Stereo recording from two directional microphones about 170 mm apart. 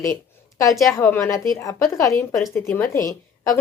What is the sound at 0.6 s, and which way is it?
A woman's voice, 20° left (ahead or behind).